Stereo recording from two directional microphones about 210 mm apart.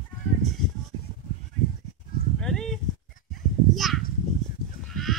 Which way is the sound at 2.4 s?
Centre (ahead or behind).